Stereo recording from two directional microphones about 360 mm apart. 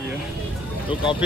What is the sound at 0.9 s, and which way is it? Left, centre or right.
Speech, centre.